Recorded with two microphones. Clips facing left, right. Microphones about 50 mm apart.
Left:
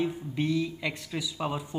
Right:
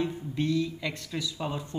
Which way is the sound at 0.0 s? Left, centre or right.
Centre.